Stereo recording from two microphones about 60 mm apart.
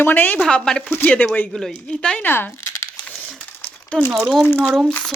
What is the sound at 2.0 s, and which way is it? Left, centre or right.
Speech, left.